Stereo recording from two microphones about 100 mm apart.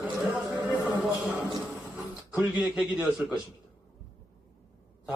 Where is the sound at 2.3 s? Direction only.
15° right (ahead or behind).